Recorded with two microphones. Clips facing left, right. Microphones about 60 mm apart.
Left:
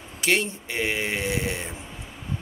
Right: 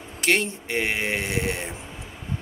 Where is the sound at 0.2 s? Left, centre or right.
Right.